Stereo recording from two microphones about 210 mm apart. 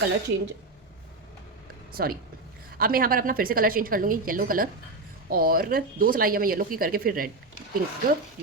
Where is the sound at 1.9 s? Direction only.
45° right (ahead or behind).